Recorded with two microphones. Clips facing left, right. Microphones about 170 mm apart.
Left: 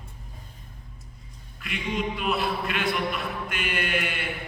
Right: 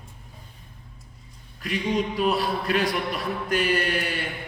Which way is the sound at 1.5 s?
35° right (ahead or behind).